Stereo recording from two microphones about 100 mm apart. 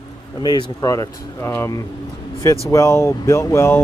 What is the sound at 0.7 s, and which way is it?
Speech, 35° left (ahead or behind).